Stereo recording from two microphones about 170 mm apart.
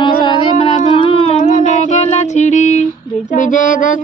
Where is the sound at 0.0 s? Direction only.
30° left (ahead or behind).